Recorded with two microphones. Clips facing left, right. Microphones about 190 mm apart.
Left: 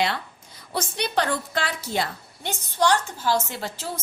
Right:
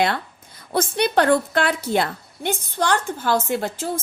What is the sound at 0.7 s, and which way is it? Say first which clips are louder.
A woman's voice: right 7 dB; 55° right (ahead or behind).